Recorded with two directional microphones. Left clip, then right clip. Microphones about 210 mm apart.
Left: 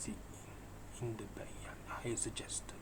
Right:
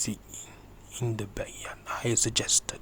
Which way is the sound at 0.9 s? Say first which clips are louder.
Right 11 dB; 50° right (ahead or behind).